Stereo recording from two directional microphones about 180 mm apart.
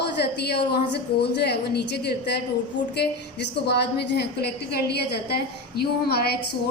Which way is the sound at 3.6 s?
65° left (ahead or behind).